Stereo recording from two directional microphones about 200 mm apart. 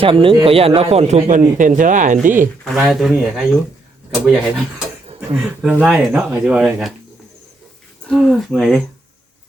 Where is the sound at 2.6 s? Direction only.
Centre (ahead or behind).